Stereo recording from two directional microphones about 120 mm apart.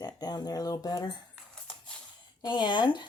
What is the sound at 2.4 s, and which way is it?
Speech, 40° left (ahead or behind).